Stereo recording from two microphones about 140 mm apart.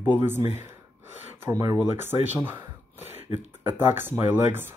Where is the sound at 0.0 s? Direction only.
15° right (ahead or behind).